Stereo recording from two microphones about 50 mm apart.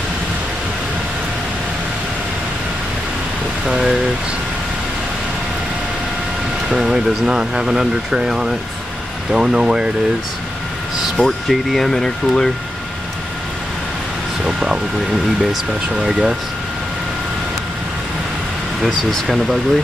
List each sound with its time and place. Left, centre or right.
3.7 s speech: centre
6.7 s speech: centre
11.2 s speech: centre
14.4 s air conditioning: centre
16.0 s speech: centre
18.9 s speech: centre